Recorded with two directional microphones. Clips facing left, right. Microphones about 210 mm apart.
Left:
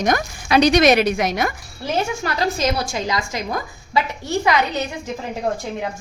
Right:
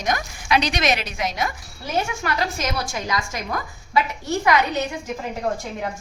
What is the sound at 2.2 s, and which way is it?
A woman's voice, 35° left (ahead or behind).